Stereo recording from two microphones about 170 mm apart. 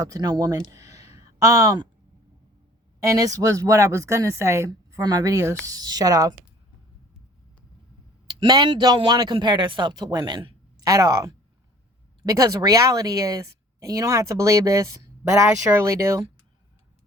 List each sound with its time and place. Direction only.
0.0 s a woman's voice: 20° right (ahead or behind)
0.7 s a sound: 20° right (ahead or behind)
3.0 s a woman's voice: 20° right (ahead or behind)
8.3 s a woman's voice: 25° right (ahead or behind)